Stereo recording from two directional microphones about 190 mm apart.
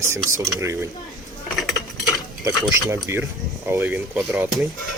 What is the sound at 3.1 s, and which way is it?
Speech, 10° right (ahead or behind).